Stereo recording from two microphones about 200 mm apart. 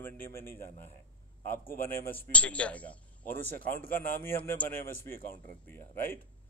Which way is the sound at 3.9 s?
45° left (ahead or behind).